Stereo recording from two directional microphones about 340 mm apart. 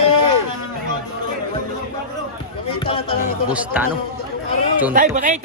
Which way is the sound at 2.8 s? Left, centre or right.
Centre.